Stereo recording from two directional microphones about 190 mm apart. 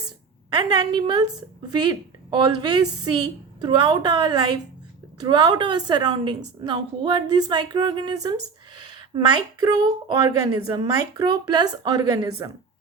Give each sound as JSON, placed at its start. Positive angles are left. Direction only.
{"t": 0.5, "sound": "speech", "side_deg": -20}